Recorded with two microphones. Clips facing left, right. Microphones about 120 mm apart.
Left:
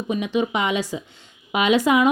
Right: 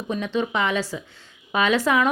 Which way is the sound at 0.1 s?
15° left (ahead or behind).